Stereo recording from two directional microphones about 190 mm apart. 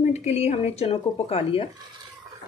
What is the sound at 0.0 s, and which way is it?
Speech, 35° left (ahead or behind).